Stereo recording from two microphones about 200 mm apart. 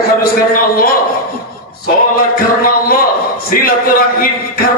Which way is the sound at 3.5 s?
45° left (ahead or behind).